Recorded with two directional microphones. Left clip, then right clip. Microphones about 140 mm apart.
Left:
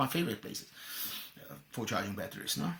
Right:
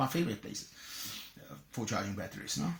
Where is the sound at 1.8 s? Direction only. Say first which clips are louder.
Left 1 dB; 15° left (ahead or behind).